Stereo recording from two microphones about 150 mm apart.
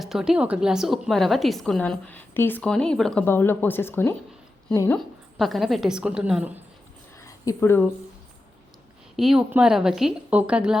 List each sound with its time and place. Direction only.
0.0 s a woman's voice: 5° right (ahead or behind)
3.2 s speech: 15° left (ahead or behind)
4.9 s a woman's voice: centre (ahead or behind)
7.2 s a sound: 20° left (ahead or behind)
9.1 s a woman's voice: centre (ahead or behind)